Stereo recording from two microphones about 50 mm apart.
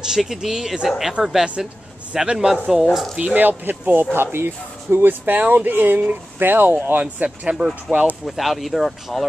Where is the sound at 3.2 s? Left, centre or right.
Right.